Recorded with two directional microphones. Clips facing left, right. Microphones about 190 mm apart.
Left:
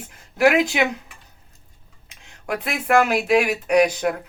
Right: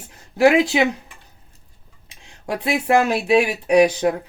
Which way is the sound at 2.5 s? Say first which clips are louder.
Right 1 dB; 30° right (ahead or behind).